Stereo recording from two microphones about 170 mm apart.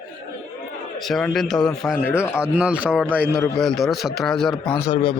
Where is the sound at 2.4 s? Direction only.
5° right (ahead or behind).